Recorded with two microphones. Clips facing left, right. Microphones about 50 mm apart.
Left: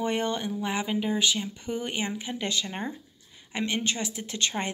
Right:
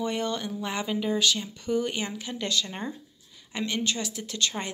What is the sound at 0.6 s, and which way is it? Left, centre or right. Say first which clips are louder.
A woman's voice: even; centre.